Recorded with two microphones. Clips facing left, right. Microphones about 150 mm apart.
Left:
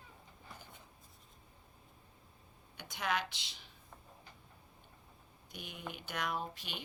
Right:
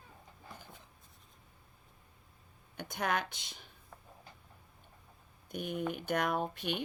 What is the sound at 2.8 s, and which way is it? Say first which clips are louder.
Speech: right 3 dB; 50° right (ahead or behind).